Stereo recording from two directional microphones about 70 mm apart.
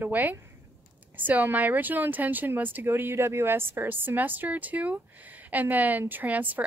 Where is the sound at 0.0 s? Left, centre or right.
Right.